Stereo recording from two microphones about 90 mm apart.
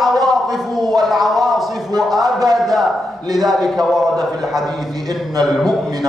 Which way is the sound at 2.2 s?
45° right (ahead or behind).